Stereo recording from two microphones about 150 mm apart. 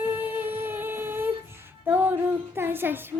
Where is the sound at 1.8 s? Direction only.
10° right (ahead or behind).